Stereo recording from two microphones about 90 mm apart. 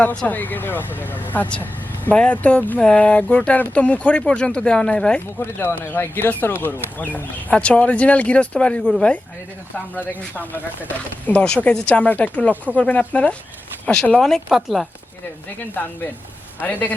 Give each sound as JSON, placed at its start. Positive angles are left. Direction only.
{"t": 0.0, "sound": "speech", "side_deg": 15}
{"t": 5.5, "sound": "speech", "side_deg": 25}
{"t": 15.8, "sound": "speech", "side_deg": 20}